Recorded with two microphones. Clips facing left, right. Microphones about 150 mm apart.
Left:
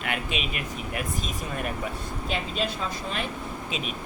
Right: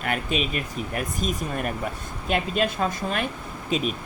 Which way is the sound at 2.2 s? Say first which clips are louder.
Right 6 dB; 55° right (ahead or behind).